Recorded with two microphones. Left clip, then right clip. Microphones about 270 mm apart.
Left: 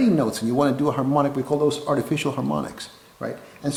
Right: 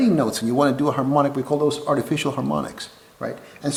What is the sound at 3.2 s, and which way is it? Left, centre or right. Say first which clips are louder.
Speech: right 1 dB; centre.